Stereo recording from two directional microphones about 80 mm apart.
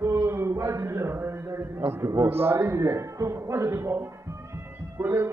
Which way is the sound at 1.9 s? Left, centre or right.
Right.